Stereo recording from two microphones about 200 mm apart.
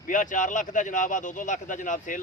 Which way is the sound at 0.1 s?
40° left (ahead or behind).